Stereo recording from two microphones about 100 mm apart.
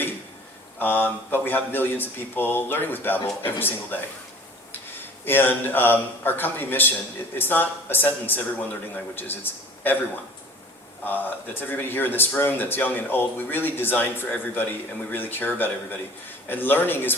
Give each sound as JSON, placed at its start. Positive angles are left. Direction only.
{"t": 0.8, "sound": "speech", "side_deg": 20}
{"t": 5.2, "sound": "a man's voice", "side_deg": 20}
{"t": 11.0, "sound": "speech", "side_deg": 20}